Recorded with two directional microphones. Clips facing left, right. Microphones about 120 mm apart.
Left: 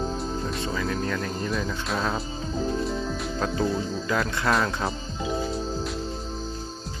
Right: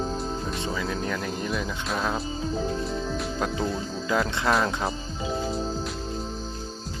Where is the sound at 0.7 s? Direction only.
15° right (ahead or behind).